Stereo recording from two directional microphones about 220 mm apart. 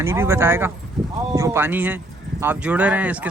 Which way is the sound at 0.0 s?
10° right (ahead or behind).